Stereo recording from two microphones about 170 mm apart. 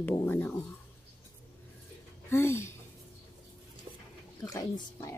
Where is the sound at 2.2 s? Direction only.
15° left (ahead or behind).